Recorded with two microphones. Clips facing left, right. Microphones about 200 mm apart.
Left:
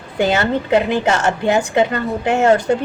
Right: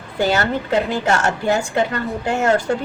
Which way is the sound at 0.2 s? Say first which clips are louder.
Left 2 dB; 20° left (ahead or behind).